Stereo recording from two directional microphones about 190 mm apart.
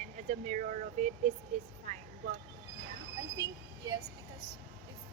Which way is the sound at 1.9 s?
40° right (ahead or behind).